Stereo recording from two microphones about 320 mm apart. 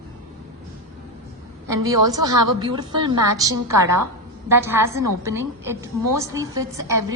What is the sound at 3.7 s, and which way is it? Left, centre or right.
Speech, right.